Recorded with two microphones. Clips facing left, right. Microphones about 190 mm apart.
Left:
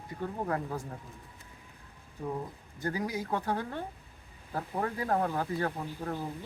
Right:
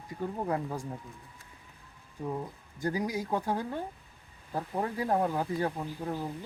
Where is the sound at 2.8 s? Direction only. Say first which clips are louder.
Right 2 dB; 15° right (ahead or behind).